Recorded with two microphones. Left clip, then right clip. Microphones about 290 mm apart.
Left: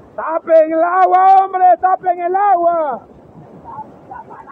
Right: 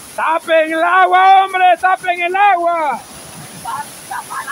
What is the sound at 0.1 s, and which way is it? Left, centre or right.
A man's voice, centre.